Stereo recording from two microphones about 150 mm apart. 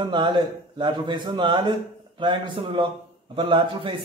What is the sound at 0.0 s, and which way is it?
A man's voice, 30° right (ahead or behind).